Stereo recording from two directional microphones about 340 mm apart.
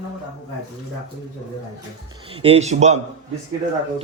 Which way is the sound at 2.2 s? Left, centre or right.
Centre.